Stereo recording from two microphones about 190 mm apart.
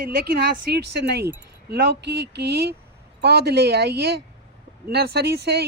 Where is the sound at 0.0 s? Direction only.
55° right (ahead or behind).